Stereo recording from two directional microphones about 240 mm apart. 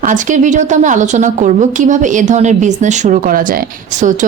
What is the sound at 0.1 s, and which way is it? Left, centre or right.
Speech, right.